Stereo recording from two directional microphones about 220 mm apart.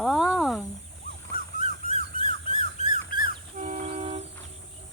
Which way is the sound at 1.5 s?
35° left (ahead or behind).